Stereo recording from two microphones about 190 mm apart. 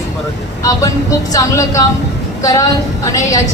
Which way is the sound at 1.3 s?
15° left (ahead or behind).